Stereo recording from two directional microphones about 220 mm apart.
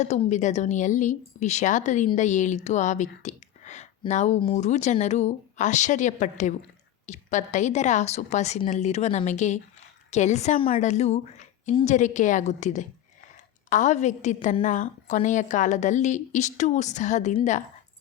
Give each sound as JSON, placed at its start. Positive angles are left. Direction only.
{"t": 0.0, "sound": "a woman's voice", "side_deg": 30}